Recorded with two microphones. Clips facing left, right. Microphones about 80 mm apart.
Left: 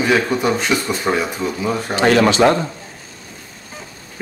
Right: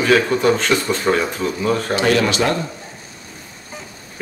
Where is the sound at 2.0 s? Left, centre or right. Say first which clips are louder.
Left 5 dB; left.